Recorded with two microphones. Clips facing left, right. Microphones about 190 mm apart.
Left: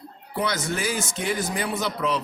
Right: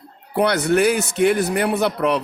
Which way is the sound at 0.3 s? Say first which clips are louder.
Right 10 dB; 65° right (ahead or behind).